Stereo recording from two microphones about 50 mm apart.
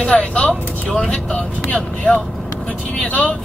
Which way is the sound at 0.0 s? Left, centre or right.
Left.